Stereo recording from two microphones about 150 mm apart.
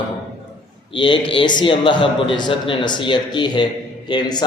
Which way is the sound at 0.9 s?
35° left (ahead or behind).